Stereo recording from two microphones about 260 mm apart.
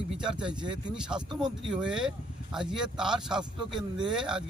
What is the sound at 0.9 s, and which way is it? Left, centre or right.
Speech, centre.